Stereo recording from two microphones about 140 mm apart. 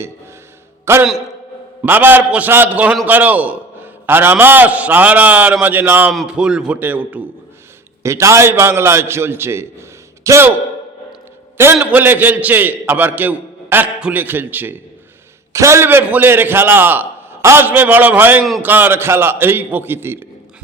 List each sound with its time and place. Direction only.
0.9 s a man's voice: 20° right (ahead or behind)
11.5 s a man's voice: 15° right (ahead or behind)